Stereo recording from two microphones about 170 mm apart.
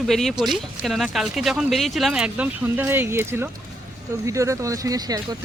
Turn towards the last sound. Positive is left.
turn(degrees=-20)  # may be behind; listen again after turning